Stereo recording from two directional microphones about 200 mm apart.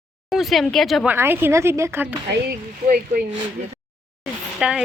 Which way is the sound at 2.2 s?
50° right (ahead or behind).